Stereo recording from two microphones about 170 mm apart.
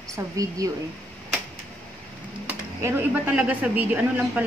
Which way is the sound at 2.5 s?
10° right (ahead or behind).